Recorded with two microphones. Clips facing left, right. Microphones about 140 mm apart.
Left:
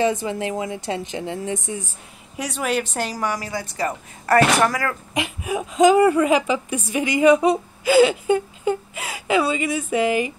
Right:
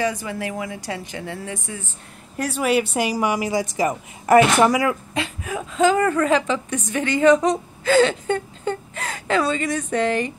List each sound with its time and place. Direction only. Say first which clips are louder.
0.0 s a woman's voice: left 3 dB; 25° left (ahead or behind)
2.3 s speech: right 3 dB; centre (ahead or behind)
5.1 s a woman's voice: left 2 dB; 15° left (ahead or behind)